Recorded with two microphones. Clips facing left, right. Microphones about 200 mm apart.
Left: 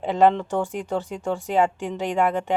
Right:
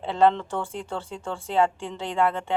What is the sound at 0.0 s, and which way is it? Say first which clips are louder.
Speech: left 2 dB; 15° left (ahead or behind).